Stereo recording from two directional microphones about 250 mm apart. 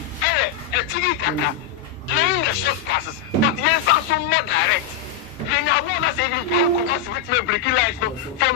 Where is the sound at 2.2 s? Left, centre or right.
Left.